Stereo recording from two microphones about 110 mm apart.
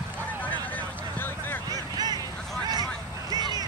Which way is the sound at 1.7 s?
40° right (ahead or behind).